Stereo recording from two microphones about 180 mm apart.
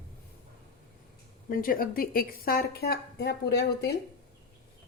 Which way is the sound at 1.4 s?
50° left (ahead or behind).